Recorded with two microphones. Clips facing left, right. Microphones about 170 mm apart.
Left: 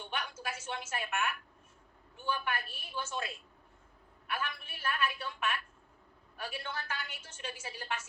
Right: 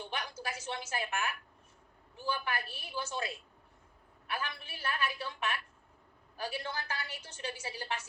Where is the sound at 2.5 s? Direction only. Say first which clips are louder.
Even; 35° right (ahead or behind).